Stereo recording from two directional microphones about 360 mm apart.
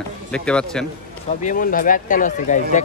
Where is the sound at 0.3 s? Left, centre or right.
Centre.